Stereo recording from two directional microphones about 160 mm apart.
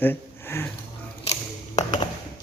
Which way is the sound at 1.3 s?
45° left (ahead or behind).